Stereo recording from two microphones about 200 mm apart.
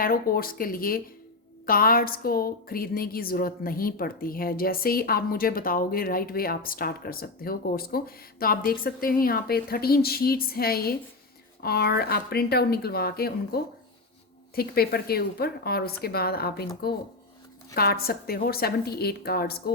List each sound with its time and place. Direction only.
0.0 s a woman's voice: 45° left (ahead or behind)
17.7 s a woman's voice: 50° left (ahead or behind)